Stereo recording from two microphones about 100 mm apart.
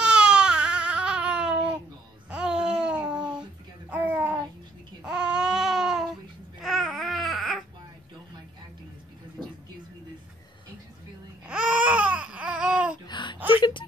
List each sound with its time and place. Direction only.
0.0 s baby cry: 10° right (ahead or behind)
2.2 s child singing: 10° right (ahead or behind)
3.9 s babbling: 15° right (ahead or behind)
5.0 s baby cry: 10° right (ahead or behind)
9.4 s a sound: centre (ahead or behind)
11.4 s babbling: 10° right (ahead or behind)
13.0 s a sound: 50° left (ahead or behind)